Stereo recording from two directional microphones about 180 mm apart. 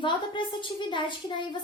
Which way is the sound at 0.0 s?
25° left (ahead or behind).